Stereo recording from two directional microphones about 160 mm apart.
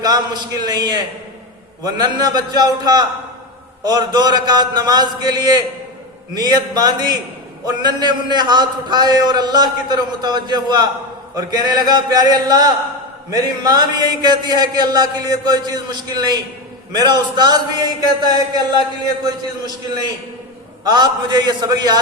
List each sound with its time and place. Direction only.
0.6 s a man's voice: 25° right (ahead or behind)
20.8 s a man's voice: 25° right (ahead or behind)